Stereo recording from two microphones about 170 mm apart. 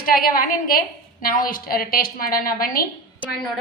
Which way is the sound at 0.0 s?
55° left (ahead or behind).